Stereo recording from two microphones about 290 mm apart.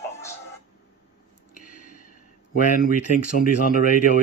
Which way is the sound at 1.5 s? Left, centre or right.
Left.